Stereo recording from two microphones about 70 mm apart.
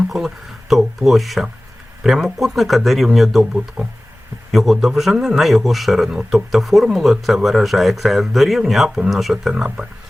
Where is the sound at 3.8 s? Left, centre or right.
Right.